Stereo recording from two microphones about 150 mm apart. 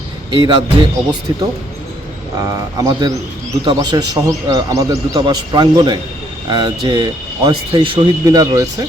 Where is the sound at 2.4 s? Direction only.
20° right (ahead or behind).